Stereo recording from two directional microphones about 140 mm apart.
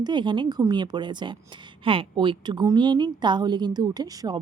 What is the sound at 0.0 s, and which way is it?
A woman's voice, 35° right (ahead or behind).